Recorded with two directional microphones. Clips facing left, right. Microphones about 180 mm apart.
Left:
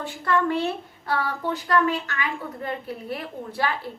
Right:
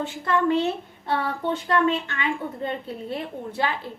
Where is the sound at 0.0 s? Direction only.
20° right (ahead or behind).